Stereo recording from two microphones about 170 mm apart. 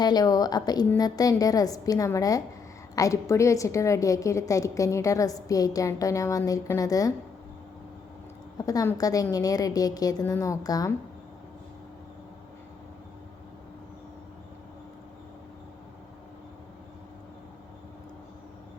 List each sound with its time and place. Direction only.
0.0 s a woman's voice: 25° left (ahead or behind)
8.5 s a woman's voice: 20° left (ahead or behind)